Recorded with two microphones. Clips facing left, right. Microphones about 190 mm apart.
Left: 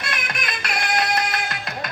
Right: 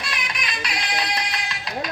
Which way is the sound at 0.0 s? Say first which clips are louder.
Left 2 dB; 50° left (ahead or behind).